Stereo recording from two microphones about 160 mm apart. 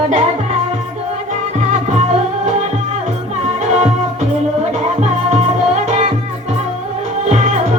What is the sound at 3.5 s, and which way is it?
Music, 45° right (ahead or behind).